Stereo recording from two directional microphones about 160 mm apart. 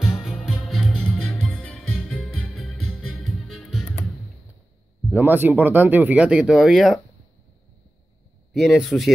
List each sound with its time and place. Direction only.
0.0 s music: centre (ahead or behind)
5.1 s speech: 10° right (ahead or behind)
8.5 s speech: centre (ahead or behind)